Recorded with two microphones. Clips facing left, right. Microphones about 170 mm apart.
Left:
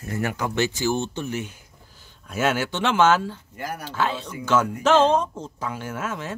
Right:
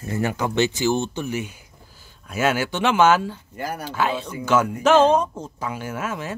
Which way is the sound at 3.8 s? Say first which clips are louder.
Right 2 dB; 10° right (ahead or behind).